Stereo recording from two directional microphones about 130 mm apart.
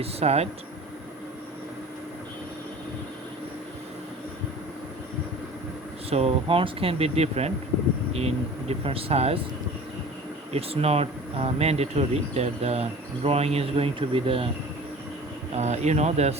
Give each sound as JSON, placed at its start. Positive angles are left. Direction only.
{"t": 0.0, "sound": "speech", "side_deg": -50}
{"t": 6.1, "sound": "speech", "side_deg": -50}
{"t": 10.5, "sound": "speech", "side_deg": -50}
{"t": 15.5, "sound": "speech", "side_deg": -60}